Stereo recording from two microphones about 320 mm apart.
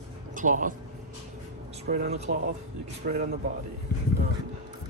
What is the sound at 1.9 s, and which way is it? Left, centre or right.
Speech, right.